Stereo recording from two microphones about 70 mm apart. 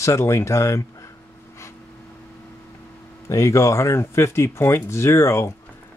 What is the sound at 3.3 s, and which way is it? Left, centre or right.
Speech, left.